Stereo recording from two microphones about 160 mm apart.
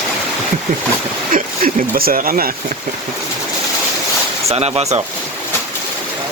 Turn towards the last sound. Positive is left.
turn(degrees=-40)  # may be behind; listen again after turning